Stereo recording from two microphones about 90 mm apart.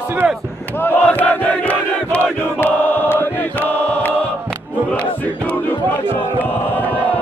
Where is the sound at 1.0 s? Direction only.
20° left (ahead or behind).